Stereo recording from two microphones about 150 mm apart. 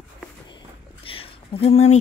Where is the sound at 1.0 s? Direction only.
40° left (ahead or behind).